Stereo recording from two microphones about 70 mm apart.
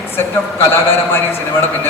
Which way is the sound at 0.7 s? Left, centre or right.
Left.